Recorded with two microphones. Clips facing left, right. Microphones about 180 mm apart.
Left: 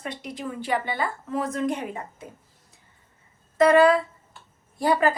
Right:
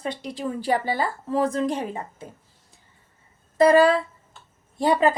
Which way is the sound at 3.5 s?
35° right (ahead or behind).